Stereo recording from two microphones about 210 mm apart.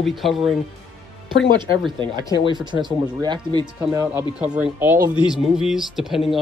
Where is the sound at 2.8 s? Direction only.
20° right (ahead or behind).